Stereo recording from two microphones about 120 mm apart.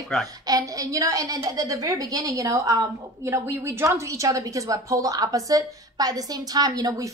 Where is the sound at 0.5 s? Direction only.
30° right (ahead or behind).